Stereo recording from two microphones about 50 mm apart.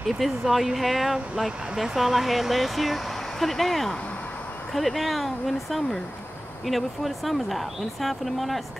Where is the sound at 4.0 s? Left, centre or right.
Left.